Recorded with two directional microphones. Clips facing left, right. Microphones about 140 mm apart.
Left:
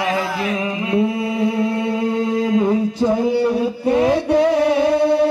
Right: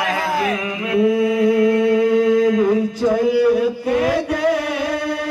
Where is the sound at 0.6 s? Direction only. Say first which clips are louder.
Left 1 dB; 30° left (ahead or behind).